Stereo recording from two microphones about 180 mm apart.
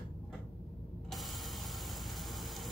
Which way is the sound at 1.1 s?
Centre (ahead or behind).